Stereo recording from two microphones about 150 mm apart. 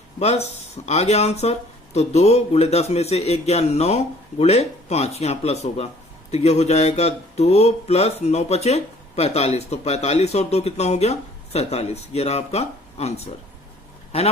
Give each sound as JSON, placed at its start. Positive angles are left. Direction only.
{"t": 0.2, "sound": "speech", "side_deg": 45}